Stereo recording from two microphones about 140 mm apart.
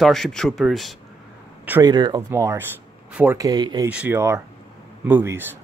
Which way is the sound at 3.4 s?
30° right (ahead or behind).